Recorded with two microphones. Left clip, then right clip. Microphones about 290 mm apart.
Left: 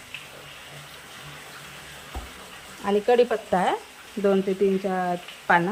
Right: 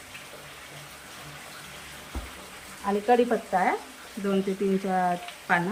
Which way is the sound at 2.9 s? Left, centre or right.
Left.